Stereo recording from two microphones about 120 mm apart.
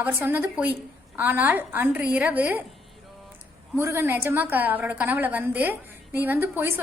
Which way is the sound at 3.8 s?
20° right (ahead or behind).